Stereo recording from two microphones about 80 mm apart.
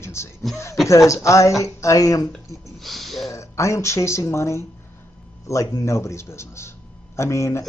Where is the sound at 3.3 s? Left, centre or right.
Left.